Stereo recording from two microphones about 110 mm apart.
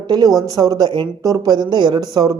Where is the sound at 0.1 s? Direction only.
35° right (ahead or behind).